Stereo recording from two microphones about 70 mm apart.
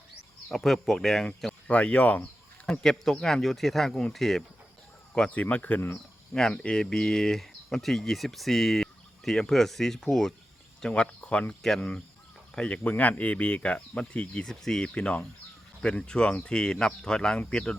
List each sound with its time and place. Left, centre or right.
0.5 s speech: centre
1.6 s speech: centre
2.6 s speech: centre
5.3 s speech: left
12.5 s speech: centre
14.4 s speech: centre